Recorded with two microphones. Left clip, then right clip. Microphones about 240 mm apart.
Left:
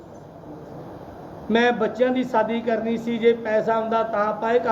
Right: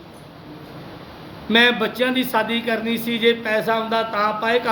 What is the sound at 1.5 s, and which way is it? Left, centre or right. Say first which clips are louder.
A man's voice: right 4 dB; right.